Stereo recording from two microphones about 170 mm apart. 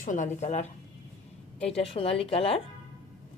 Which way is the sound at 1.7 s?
35° left (ahead or behind).